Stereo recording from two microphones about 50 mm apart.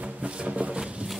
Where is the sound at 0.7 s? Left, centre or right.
Right.